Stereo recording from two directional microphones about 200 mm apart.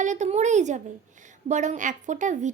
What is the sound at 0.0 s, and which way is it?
A woman's voice, 35° right (ahead or behind).